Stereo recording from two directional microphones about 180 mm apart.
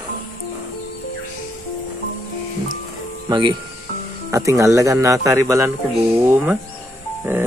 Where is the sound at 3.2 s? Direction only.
25° right (ahead or behind).